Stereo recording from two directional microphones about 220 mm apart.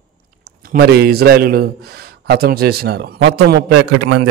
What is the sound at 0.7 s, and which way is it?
A man's voice, 45° right (ahead or behind).